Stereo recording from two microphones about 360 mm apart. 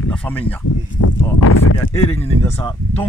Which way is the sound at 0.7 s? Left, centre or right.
Left.